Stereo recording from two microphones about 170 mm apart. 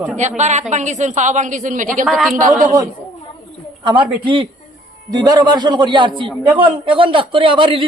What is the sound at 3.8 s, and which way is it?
A man's voice, 30° right (ahead or behind).